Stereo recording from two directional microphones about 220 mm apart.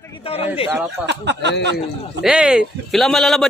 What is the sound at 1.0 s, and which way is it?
Speech, 50° right (ahead or behind).